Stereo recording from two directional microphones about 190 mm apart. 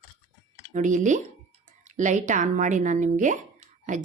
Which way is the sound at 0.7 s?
40° right (ahead or behind).